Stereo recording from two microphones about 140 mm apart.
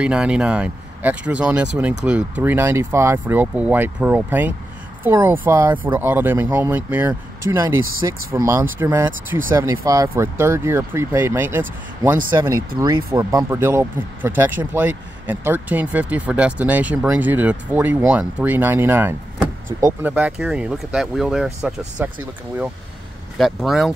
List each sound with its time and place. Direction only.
0.0 s speech: 5° right (ahead or behind)
12.4 s speech: 25° right (ahead or behind); by 22.1 s 5° right (ahead or behind)
23.3 s speech: centre (ahead or behind)